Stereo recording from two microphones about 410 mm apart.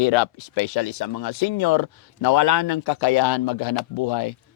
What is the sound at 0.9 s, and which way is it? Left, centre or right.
Speech, left.